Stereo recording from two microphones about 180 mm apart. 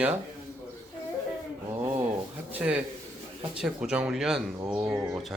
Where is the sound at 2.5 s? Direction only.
5° right (ahead or behind).